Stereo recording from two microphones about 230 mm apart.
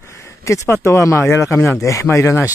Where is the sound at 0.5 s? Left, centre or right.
Centre.